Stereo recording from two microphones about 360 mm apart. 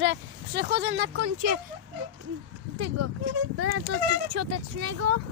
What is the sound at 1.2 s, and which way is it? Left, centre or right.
Speech, right.